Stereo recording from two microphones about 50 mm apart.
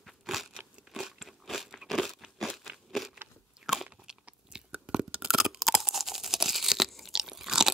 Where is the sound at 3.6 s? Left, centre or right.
Centre.